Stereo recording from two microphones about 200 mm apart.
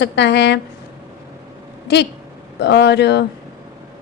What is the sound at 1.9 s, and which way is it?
A woman's voice, 55° left (ahead or behind).